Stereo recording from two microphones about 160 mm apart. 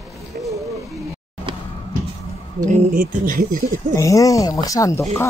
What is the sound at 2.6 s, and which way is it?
Speech, 60° right (ahead or behind).